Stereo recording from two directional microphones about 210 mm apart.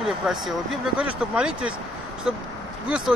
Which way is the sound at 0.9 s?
5° right (ahead or behind).